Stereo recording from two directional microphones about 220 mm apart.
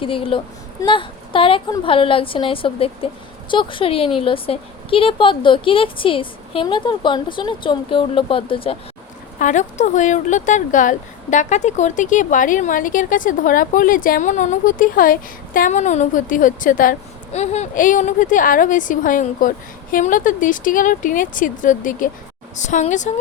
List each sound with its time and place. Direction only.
0.0 s speech: 25° left (ahead or behind)
9.4 s speech: 35° left (ahead or behind)